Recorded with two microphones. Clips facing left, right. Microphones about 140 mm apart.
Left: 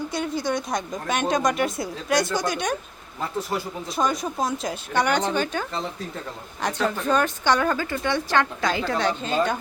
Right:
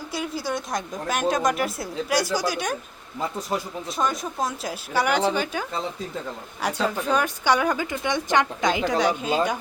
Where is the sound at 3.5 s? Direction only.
15° right (ahead or behind).